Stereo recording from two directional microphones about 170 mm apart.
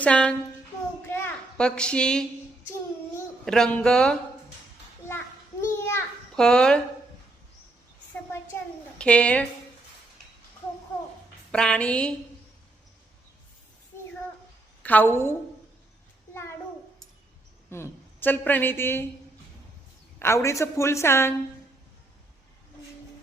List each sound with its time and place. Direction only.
0.0 s a woman's voice: 5° left (ahead or behind)
1.0 s a sound: 10° left (ahead or behind)
3.4 s speech: 5° left (ahead or behind)
5.7 s children playing: 15° left (ahead or behind)
6.3 s speech: 5° left (ahead or behind)
9.0 s a woman's voice: 5° left (ahead or behind)
11.5 s speech: 5° left (ahead or behind)
14.8 s a woman's voice: 10° left (ahead or behind)
17.7 s a woman's voice: 15° left (ahead or behind)
20.1 s a woman's voice: 15° left (ahead or behind)